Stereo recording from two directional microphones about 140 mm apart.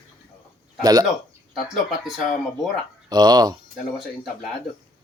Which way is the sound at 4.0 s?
Centre (ahead or behind).